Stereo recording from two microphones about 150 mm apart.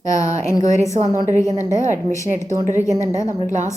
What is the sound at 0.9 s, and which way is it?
Speech, 50° right (ahead or behind).